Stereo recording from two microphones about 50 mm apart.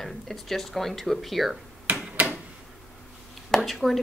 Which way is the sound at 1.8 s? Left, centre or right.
Right.